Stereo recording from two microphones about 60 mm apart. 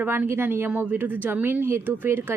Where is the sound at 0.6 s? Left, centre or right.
Right.